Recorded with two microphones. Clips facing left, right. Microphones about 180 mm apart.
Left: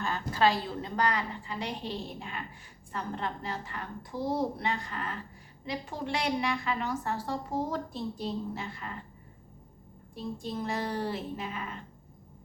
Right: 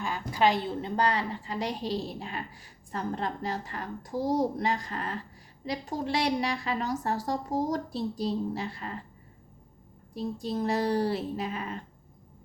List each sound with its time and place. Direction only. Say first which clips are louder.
0.0 s a woman's voice: right 1 dB; 15° right (ahead or behind); by 8.9 s 35° right (ahead or behind)
10.2 s a woman's voice: right 4 dB; 40° right (ahead or behind)